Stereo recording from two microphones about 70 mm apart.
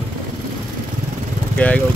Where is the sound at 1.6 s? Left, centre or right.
Centre.